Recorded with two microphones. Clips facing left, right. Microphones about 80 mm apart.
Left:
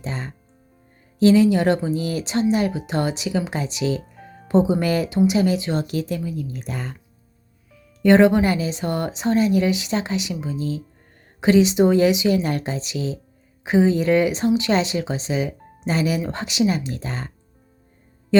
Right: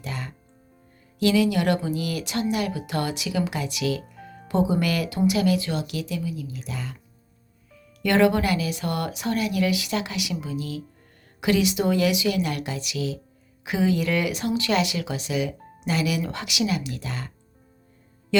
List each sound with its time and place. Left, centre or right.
0.0 s speech: left
5.7 s a woman's voice: left
8.0 s speech: left